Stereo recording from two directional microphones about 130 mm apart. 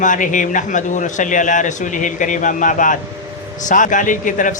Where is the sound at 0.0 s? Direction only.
80° left.